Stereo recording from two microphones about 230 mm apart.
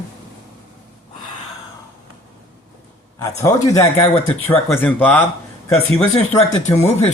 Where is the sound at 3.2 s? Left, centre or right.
Centre.